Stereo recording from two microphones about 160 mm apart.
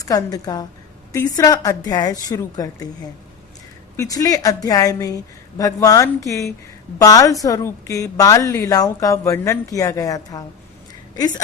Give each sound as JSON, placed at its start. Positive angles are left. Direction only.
{"t": 0.0, "sound": "a woman's voice", "side_deg": 20}
{"t": 3.9, "sound": "a woman's voice", "side_deg": 20}